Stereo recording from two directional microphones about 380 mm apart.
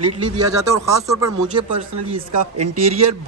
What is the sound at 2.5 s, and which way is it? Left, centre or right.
Speech, right.